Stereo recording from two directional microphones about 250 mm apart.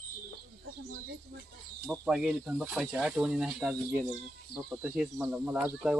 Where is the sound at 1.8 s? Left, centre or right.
Centre.